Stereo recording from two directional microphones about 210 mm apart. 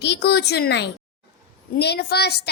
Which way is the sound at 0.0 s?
55° left (ahead or behind).